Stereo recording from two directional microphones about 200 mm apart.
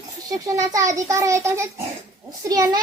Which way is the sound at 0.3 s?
15° right (ahead or behind).